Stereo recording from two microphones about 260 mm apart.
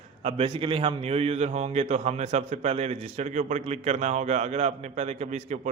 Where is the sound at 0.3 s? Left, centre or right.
Right.